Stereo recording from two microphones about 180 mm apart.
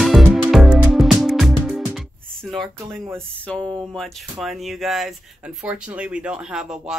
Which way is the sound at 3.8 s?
Centre (ahead or behind).